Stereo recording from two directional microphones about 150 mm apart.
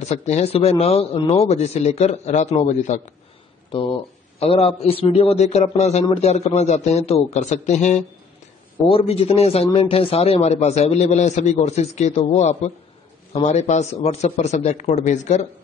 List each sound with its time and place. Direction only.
0.1 s speech: 45° left (ahead or behind)
4.4 s a man's voice: 40° left (ahead or behind)
8.8 s speech: 40° left (ahead or behind)